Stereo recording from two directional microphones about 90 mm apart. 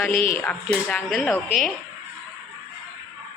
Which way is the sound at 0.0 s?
25° left (ahead or behind).